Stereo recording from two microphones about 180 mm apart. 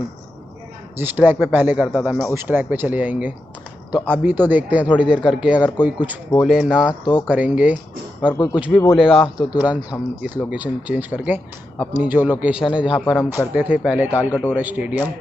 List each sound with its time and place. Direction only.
0.9 s a man's voice: 10° right (ahead or behind)
8.3 s speech: 20° left (ahead or behind)
8.5 s a man's voice: 5° right (ahead or behind)
13.0 s speech: 10° left (ahead or behind)
13.5 s a man's voice: 5° right (ahead or behind)